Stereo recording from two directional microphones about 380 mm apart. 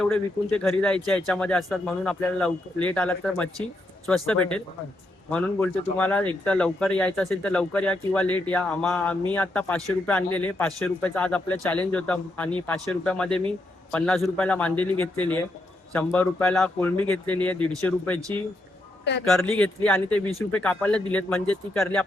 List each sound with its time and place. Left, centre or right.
0.0 s speech: centre
19.2 s speech: centre